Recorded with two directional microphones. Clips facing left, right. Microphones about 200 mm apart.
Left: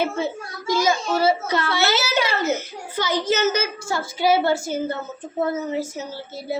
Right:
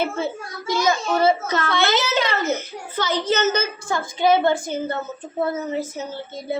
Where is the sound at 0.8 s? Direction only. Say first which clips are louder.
Right 1 dB; 10° left (ahead or behind).